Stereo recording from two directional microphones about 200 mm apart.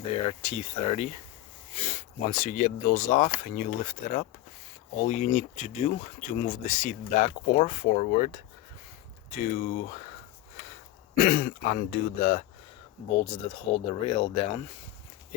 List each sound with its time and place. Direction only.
0.3 s speech: 30° left (ahead or behind)
9.4 s speech: 40° left (ahead or behind)
11.2 s speech: 45° left (ahead or behind)
13.1 s speech: 25° left (ahead or behind)